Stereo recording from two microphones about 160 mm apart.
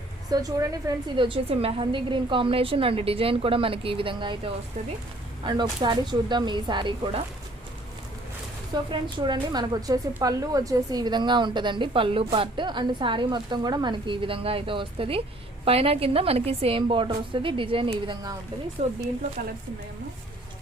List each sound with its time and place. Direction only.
0.3 s a woman's voice: 20° right (ahead or behind)
8.7 s a woman's voice: 30° right (ahead or behind)
18.8 s speech: 45° right (ahead or behind)